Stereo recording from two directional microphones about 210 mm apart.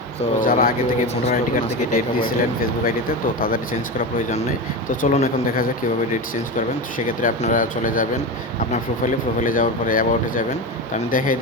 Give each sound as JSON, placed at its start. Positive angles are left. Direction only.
{"t": 0.2, "sound": "speech", "side_deg": 40}
{"t": 4.2, "sound": "speech", "side_deg": 35}